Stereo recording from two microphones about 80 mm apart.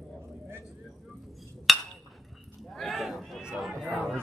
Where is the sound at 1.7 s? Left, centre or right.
Centre.